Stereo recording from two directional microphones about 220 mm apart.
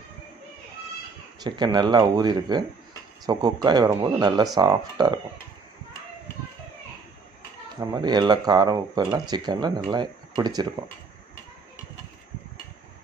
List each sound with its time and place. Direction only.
1.4 s speech: 20° right (ahead or behind)
7.8 s speech: 20° right (ahead or behind)